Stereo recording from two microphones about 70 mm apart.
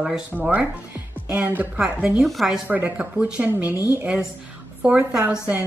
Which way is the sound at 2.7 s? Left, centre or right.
Right.